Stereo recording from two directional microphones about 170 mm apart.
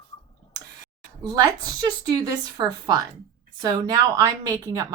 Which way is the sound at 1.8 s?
25° right (ahead or behind).